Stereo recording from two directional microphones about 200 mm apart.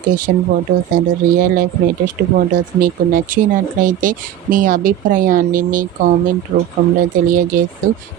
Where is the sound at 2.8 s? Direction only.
45° right (ahead or behind).